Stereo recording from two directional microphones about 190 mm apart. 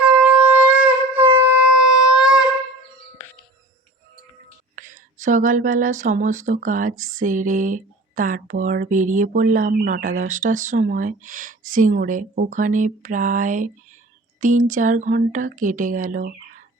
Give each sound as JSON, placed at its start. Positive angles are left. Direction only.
{"t": 0.0, "sound": "shofar", "side_deg": -5}
{"t": 4.7, "sound": "speech", "side_deg": -45}
{"t": 14.7, "sound": "speech", "side_deg": -45}